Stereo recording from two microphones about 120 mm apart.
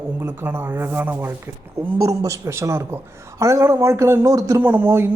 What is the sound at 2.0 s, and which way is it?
Speech, 25° right (ahead or behind).